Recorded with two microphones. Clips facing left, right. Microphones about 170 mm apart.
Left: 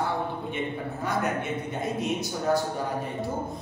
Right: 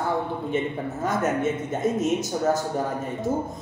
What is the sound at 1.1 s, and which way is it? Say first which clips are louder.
A woman's voice: right 5 dB; 45° right (ahead or behind).